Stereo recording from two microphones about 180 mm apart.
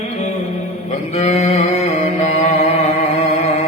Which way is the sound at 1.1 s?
40° left (ahead or behind).